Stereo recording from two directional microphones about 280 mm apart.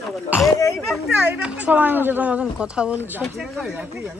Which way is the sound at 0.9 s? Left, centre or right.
Centre.